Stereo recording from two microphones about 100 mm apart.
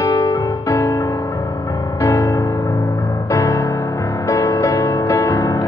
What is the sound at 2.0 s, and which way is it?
Music, 30° left (ahead or behind).